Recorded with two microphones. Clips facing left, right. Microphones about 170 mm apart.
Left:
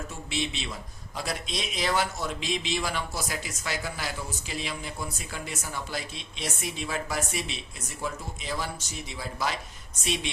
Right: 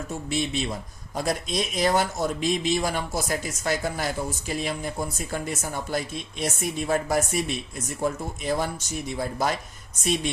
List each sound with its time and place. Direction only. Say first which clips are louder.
0.3 s speech: right 5 dB; 45° right (ahead or behind)